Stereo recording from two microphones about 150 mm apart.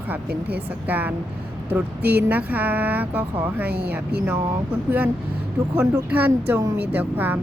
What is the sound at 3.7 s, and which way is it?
Speech, 90° right.